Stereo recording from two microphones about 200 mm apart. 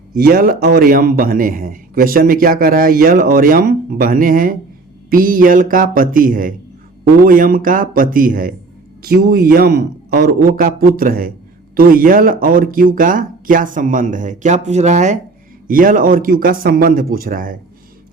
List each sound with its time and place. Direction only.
0.2 s a man's voice: 45° right (ahead or behind)